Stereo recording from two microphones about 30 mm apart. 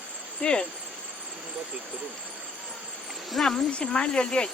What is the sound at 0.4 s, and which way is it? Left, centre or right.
Speech, left.